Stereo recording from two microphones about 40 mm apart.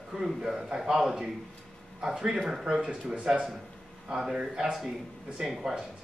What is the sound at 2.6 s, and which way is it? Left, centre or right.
A man's voice, right.